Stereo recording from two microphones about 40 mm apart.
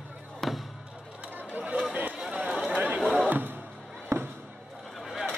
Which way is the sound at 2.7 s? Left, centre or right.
Right.